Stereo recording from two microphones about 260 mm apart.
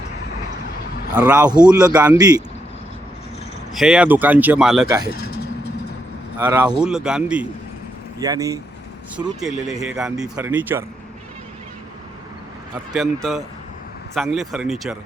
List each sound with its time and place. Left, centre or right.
1.1 s speech: centre
1.8 s speech: centre
3.8 s speech: centre
5.1 s vehicle: left
6.4 s speech: centre
9.4 s speech: centre
12.9 s speech: centre